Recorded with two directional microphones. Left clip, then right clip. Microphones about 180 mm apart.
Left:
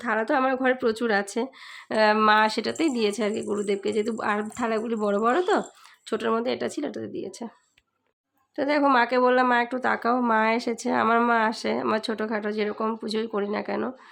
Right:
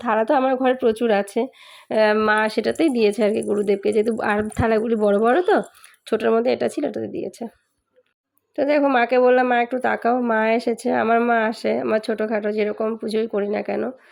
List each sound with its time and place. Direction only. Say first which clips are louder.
0.0 s speech: right 5 dB; 15° right (ahead or behind)
8.5 s speech: right 3 dB; 15° right (ahead or behind)